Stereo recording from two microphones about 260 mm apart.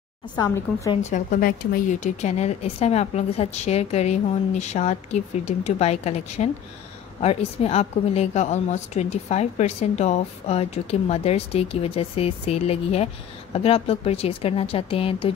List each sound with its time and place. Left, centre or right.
0.7 s a woman's voice: centre
1.1 s a woman's voice: left